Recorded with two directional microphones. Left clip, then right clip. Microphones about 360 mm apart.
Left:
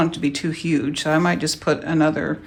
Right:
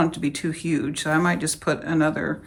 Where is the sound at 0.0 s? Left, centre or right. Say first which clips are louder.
Left 2 dB; centre.